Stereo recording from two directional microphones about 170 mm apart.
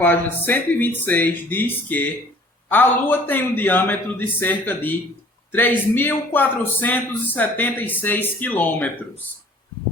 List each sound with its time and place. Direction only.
0.0 s a man's voice: 10° left (ahead or behind)